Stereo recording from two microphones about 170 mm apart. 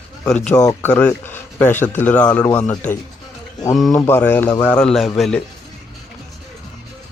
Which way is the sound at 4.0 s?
15° left (ahead or behind).